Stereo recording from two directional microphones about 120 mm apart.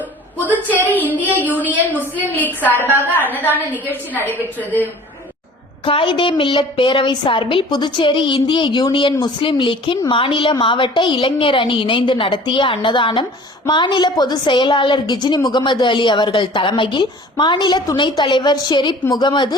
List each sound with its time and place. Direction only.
0.5 s child singing: 15° left (ahead or behind)
1.5 s a woman's voice: 15° right (ahead or behind)
2.0 s a woman's voice: 15° left (ahead or behind)
5.8 s a woman's voice: 45° left (ahead or behind)